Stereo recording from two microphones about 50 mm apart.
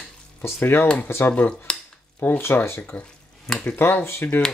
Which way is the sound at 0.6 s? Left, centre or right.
Left.